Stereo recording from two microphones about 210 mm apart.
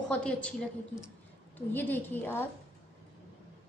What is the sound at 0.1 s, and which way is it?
Speech, 5° left (ahead or behind).